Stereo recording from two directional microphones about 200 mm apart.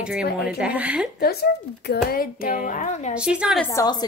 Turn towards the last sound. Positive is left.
turn(degrees=15)  # may be behind; listen again after turning